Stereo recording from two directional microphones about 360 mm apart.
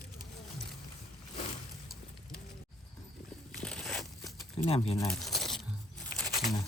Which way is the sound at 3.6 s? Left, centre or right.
Centre.